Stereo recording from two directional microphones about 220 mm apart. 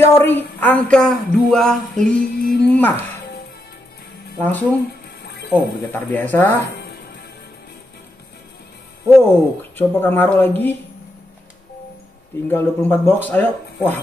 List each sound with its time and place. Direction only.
0.0 s speech: 10° left (ahead or behind)
2.3 s speech: 45° left (ahead or behind)
2.7 s speech: 10° left (ahead or behind)
4.4 s speech: 10° left (ahead or behind)
6.1 s speech: 10° left (ahead or behind)
9.1 s speech: 10° left (ahead or behind)
12.4 s speech: 10° left (ahead or behind)